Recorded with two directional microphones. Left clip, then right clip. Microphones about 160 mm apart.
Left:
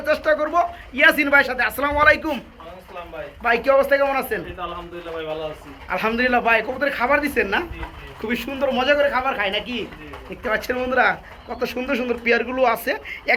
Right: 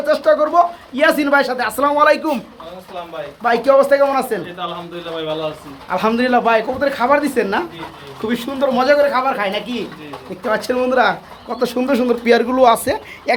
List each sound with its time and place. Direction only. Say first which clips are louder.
0.0 s speech: right 6 dB; centre (ahead or behind)
3.4 s speech: right 5 dB; 5° right (ahead or behind)
5.9 s speech: right 4 dB; 10° right (ahead or behind)
11.6 s speech: right 7 dB; 25° right (ahead or behind)